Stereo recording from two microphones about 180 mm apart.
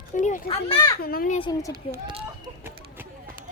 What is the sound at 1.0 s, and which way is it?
Speech, 55° left (ahead or behind).